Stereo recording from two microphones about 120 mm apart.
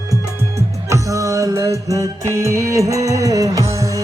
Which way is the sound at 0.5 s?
25° right (ahead or behind).